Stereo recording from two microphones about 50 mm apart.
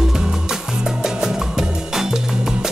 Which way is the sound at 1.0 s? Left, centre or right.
Centre.